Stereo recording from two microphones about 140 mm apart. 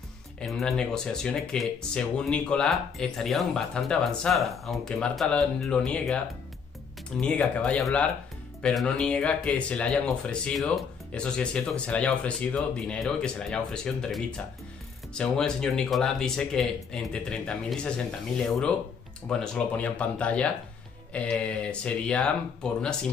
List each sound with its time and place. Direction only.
0.4 s speech: centre (ahead or behind)
7.2 s speech: 10° left (ahead or behind)